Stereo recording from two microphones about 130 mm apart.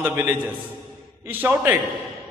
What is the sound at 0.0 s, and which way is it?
A man's voice, 15° right (ahead or behind).